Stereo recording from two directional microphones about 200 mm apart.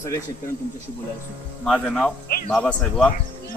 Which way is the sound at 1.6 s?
5° left (ahead or behind).